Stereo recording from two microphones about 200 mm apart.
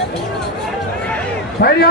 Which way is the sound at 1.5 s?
55° left (ahead or behind).